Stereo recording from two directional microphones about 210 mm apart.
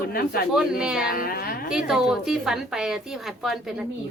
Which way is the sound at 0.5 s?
5° right (ahead or behind).